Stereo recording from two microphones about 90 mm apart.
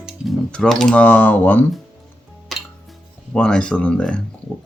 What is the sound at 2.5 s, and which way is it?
Music, centre (ahead or behind).